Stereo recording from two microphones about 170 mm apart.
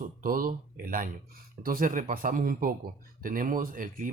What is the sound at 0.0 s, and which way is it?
Speech, 55° right (ahead or behind).